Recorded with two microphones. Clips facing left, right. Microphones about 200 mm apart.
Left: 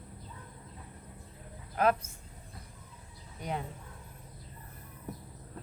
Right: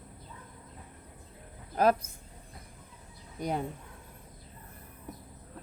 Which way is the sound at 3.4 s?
40° right (ahead or behind).